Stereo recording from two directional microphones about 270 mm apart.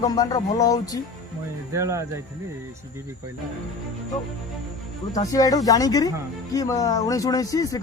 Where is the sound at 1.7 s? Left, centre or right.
Centre.